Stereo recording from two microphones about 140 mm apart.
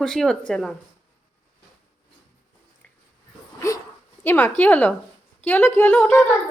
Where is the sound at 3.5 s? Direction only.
25° left (ahead or behind).